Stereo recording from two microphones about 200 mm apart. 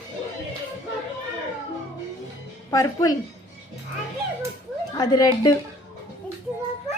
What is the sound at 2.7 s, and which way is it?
Speech, 15° left (ahead or behind).